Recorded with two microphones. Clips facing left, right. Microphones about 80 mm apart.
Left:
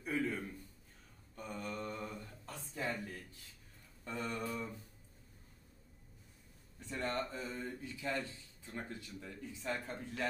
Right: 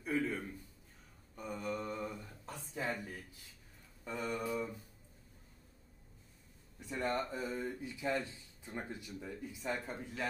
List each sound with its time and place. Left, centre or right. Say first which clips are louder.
0.0 s a sound: right 1 dB; centre
4.0 s mantra: right 2 dB; centre
6.8 s speech: right 2 dB; centre